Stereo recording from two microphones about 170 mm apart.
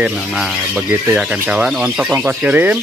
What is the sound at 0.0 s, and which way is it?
Speech, 5° right (ahead or behind).